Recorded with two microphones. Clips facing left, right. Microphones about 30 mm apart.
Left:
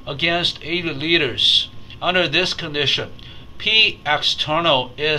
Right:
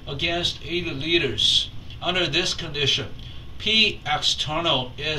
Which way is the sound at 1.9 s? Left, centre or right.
Left.